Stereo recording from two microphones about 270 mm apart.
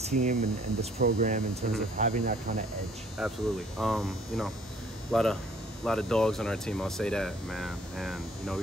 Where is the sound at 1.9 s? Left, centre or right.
Right.